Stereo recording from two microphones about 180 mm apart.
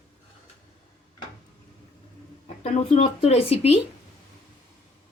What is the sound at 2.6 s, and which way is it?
Speech, 40° left (ahead or behind).